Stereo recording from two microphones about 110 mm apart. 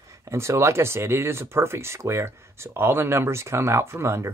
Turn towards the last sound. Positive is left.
turn(degrees=-25)  # may be behind; listen again after turning